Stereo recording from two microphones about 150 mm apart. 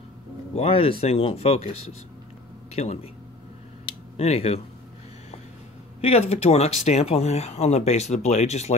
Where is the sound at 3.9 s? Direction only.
45° left (ahead or behind).